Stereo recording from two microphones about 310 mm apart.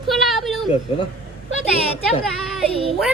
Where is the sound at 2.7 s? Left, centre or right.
Centre.